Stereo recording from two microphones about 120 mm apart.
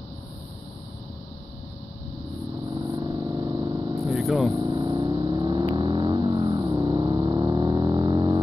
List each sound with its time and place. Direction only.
2.7 s vehicle: 35° right (ahead or behind)
4.1 s vehicle: centre (ahead or behind)
4.6 s vehicle: 40° right (ahead or behind)